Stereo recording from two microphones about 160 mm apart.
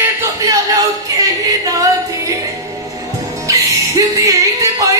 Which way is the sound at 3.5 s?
20° right (ahead or behind).